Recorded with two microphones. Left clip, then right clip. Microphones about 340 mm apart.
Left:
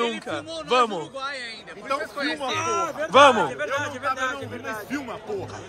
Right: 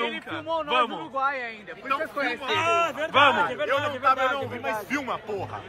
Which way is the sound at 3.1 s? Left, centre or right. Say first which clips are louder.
Left 6 dB; centre.